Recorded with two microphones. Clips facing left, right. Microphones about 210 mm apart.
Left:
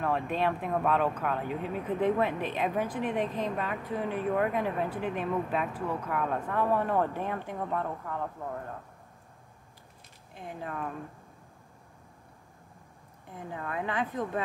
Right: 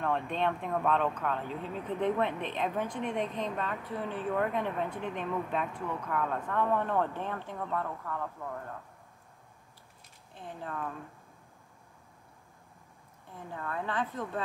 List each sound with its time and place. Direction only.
0.0 s speech: 5° left (ahead or behind)
5.7 s speech: 35° left (ahead or behind)
6.0 s speech: 10° left (ahead or behind)
10.3 s speech: 10° left (ahead or behind)
13.3 s speech: 15° left (ahead or behind)